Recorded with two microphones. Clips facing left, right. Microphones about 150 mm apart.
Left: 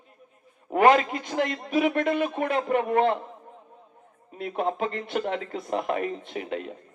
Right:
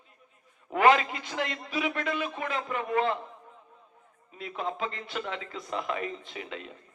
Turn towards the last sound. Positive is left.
turn(degrees=50)  # may be behind; listen again after turning